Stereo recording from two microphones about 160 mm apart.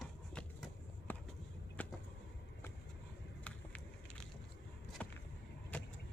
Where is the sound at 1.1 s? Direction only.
10° left (ahead or behind).